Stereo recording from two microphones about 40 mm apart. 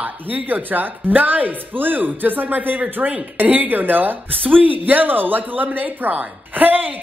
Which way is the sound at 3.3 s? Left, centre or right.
Right.